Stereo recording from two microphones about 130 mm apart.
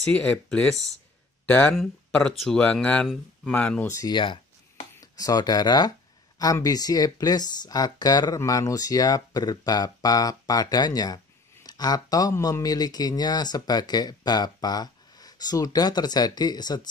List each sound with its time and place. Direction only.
0.1 s speech: 10° left (ahead or behind)
3.8 s speech: 25° left (ahead or behind)
4.1 s speech: 40° left (ahead or behind)
5.1 s speech: 30° left (ahead or behind)